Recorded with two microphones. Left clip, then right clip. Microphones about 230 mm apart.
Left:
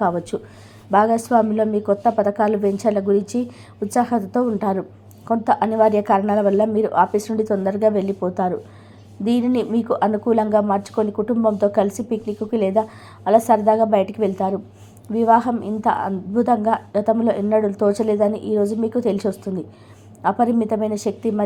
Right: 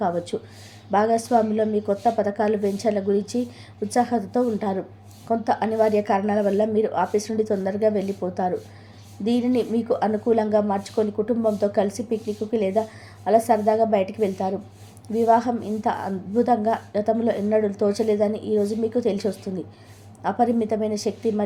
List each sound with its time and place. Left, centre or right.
0.3 s a woman's voice: centre